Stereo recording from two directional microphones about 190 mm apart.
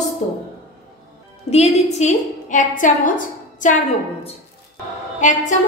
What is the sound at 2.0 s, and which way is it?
A woman's voice, 40° left (ahead or behind).